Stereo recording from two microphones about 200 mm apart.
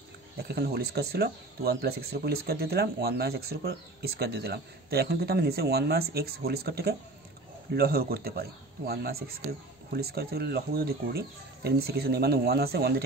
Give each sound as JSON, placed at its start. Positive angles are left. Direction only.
{"t": 0.4, "sound": "speech", "side_deg": -50}